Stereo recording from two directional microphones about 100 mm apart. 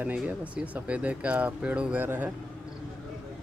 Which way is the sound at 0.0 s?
15° right (ahead or behind).